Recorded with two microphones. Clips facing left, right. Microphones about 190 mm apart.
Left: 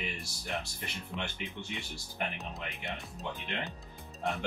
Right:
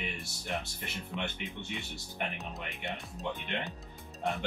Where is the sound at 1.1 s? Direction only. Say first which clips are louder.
Right 2 dB; centre (ahead or behind).